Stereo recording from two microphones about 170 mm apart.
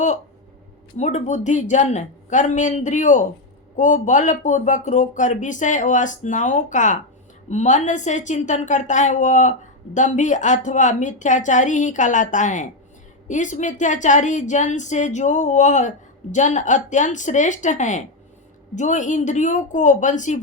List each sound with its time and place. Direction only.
0.9 s a woman's voice: 45° left (ahead or behind)